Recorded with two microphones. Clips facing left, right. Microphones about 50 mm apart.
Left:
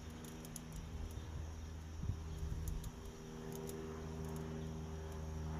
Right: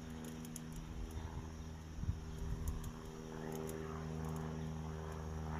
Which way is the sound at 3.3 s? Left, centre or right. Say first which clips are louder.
Right 2 dB; right.